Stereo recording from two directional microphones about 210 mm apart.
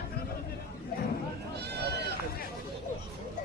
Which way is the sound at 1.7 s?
50° right (ahead or behind).